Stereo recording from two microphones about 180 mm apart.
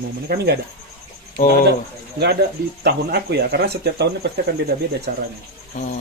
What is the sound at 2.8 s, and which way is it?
Speech, 60° right (ahead or behind).